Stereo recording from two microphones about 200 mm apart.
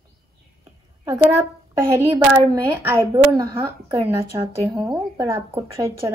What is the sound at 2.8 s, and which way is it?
Speech, 15° right (ahead or behind).